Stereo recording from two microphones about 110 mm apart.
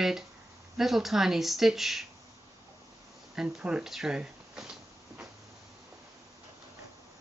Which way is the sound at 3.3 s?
5° right (ahead or behind).